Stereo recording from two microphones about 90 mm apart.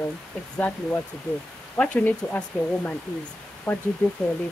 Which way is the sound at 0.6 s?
20° left (ahead or behind).